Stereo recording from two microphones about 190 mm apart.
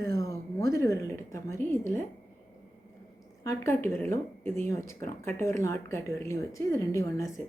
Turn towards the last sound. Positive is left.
turn(degrees=15)  # may be behind; listen again after turning